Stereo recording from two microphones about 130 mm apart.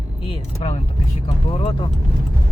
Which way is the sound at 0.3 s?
55° left (ahead or behind).